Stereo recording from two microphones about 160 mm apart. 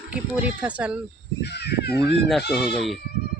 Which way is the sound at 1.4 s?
90° left.